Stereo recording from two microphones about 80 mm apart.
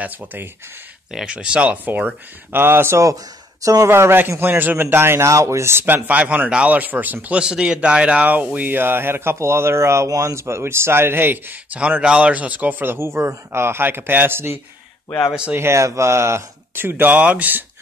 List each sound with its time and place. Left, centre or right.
0.0 s a man's voice: right
1.1 s speech: centre; by 3.0 s right
3.6 s speech: right
3.9 s a man's voice: right